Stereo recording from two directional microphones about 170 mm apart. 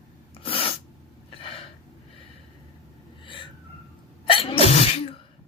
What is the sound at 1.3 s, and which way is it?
Gasp, 35° left (ahead or behind).